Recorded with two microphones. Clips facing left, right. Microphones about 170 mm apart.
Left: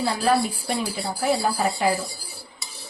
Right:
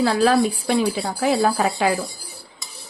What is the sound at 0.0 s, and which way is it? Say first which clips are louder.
Speech: right 5 dB; 90° right.